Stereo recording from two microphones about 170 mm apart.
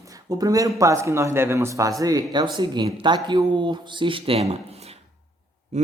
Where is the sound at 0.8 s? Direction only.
15° right (ahead or behind).